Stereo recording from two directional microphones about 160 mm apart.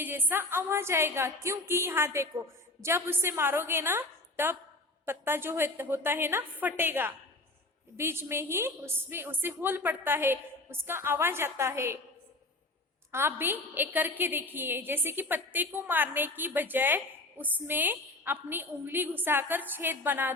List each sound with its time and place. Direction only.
0.0 s a woman's voice: 10° right (ahead or behind)
13.1 s a woman's voice: 15° right (ahead or behind)